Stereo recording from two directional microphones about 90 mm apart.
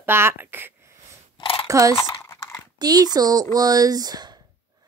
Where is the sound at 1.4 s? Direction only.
90° left.